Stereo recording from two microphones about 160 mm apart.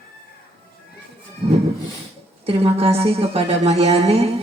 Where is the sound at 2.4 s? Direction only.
40° right (ahead or behind).